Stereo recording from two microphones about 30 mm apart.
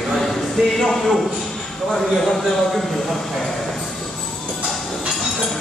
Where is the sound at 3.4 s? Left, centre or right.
Centre.